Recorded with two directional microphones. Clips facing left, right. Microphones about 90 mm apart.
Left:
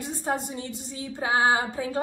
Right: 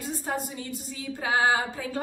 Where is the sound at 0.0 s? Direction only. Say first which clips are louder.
Left 2 dB; 25° left (ahead or behind).